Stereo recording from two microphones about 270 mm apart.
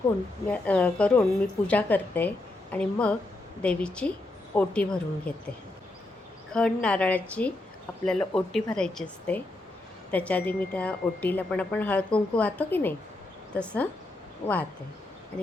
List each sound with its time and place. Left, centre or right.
0.4 s speech: centre
6.5 s speech: centre
14.4 s speech: centre